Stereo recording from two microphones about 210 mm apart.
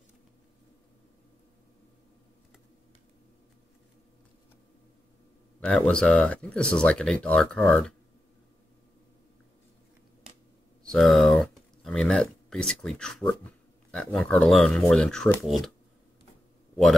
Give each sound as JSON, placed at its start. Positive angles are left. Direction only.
{"t": 5.6, "sound": "speech", "side_deg": 5}
{"t": 10.8, "sound": "speech", "side_deg": 0}